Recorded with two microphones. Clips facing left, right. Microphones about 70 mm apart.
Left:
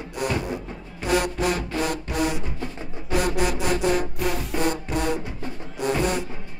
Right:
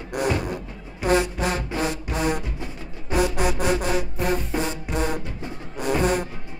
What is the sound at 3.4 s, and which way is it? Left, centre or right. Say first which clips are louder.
Music: even; left.